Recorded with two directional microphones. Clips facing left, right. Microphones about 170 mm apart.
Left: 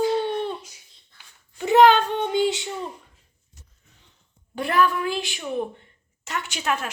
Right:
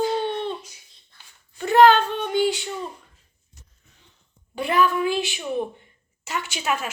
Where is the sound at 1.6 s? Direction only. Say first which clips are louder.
Even; 15° left (ahead or behind).